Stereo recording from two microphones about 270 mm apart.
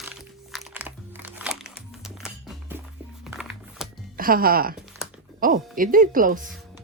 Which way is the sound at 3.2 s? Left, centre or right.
Centre.